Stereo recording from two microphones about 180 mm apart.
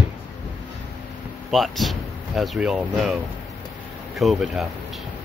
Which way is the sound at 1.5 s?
Centre (ahead or behind).